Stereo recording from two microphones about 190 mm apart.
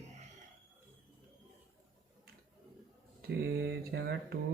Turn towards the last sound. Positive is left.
turn(degrees=-60)  # may be behind; listen again after turning